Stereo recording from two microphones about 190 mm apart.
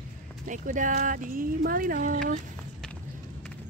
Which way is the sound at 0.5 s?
40° right (ahead or behind).